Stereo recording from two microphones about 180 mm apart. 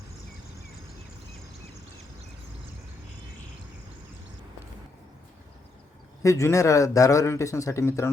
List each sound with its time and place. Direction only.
6.2 s speech: 15° left (ahead or behind)